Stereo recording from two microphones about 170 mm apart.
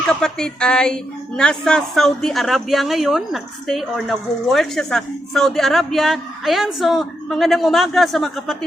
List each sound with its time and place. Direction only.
0.1 s a man's voice: 5° left (ahead or behind)